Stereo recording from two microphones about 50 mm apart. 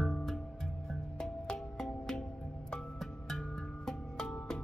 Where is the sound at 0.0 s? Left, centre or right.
Centre.